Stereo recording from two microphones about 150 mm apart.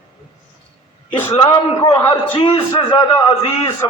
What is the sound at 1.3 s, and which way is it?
A man's voice, 35° left (ahead or behind).